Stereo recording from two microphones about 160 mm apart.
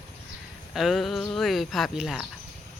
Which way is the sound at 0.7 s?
Centre (ahead or behind).